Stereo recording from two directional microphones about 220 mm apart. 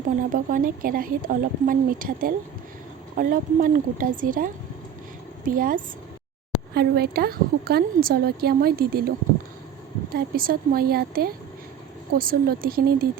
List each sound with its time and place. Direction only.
0.3 s a woman's voice: 40° right (ahead or behind)